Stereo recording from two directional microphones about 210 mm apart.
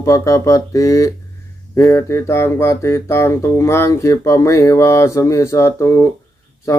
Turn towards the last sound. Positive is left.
turn(degrees=15)  # may be behind; listen again after turning